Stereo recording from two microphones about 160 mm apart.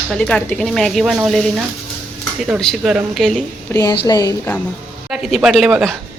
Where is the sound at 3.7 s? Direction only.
15° left (ahead or behind).